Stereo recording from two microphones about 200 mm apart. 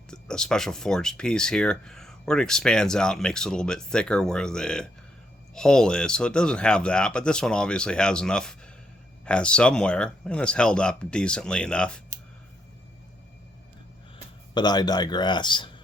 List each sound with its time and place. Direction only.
0.1 s speech: 5° left (ahead or behind)
14.5 s a man's voice: 20° left (ahead or behind)